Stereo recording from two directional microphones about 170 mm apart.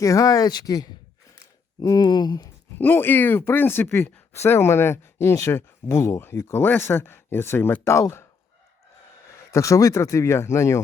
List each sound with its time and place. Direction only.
0.0 s speech: 20° left (ahead or behind)
2.7 s speech: 10° left (ahead or behind)
9.5 s speech: 15° left (ahead or behind)